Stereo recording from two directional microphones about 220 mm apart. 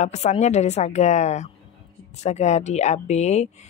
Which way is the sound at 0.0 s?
30° left (ahead or behind).